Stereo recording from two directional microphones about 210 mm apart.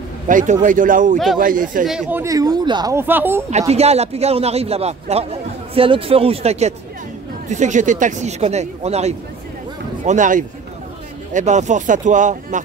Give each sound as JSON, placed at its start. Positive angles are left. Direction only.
{"t": 0.3, "sound": "speech", "side_deg": -40}
{"t": 1.9, "sound": "speech", "side_deg": -5}
{"t": 3.4, "sound": "a man's voice", "side_deg": -30}